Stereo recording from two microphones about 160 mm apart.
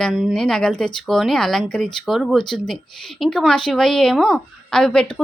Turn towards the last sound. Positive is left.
turn(degrees=5)  # may be behind; listen again after turning